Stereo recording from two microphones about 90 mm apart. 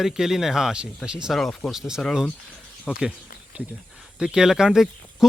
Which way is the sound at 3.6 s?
15° right (ahead or behind).